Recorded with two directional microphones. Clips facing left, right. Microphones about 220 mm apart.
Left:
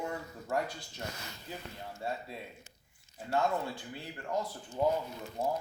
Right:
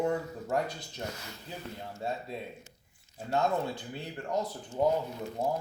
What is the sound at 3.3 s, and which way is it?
Speech, 20° right (ahead or behind).